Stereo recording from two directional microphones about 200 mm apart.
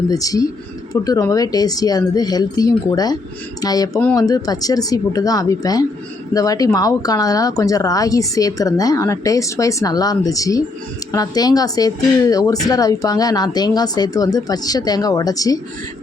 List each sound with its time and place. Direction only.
0.1 s a woman's voice: 15° left (ahead or behind)